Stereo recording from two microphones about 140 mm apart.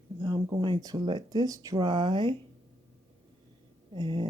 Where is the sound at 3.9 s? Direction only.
35° right (ahead or behind).